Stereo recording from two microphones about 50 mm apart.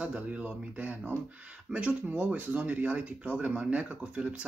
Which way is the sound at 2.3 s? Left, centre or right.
Right.